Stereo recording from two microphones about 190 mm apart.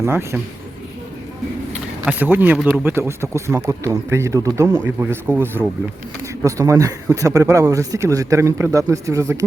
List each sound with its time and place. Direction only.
0.0 s speech: 15° right (ahead or behind)
2.0 s speech: 10° right (ahead or behind)